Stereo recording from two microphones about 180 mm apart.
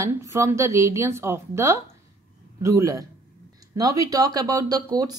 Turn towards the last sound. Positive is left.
turn(degrees=-20)  # may be behind; listen again after turning